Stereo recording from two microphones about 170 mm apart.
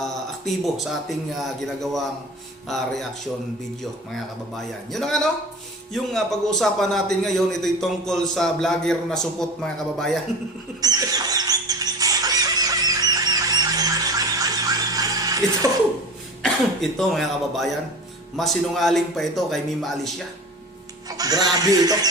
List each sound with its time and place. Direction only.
0.0 s a man's voice: centre (ahead or behind)
4.5 s a man's voice: centre (ahead or behind)
10.8 s squeal: 20° right (ahead or behind)
16.4 s a man's voice: centre (ahead or behind)
21.1 s speech: 20° right (ahead or behind)